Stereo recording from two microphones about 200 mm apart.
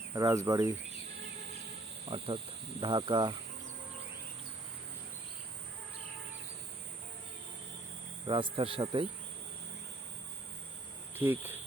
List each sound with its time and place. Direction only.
0.1 s speech: 15° right (ahead or behind)
2.0 s speech: 25° right (ahead or behind)
8.3 s speech: 25° right (ahead or behind)
11.2 s speech: 10° right (ahead or behind)